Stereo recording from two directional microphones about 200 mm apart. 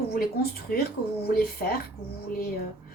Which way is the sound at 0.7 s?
50° left (ahead or behind).